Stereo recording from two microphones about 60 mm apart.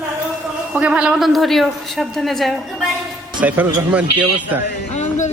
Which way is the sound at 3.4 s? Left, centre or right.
Right.